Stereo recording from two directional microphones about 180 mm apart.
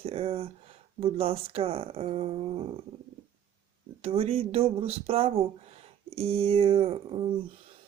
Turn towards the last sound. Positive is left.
turn(degrees=-30)  # may be behind; listen again after turning